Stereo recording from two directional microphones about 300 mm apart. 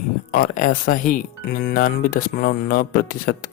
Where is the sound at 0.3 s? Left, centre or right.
Left.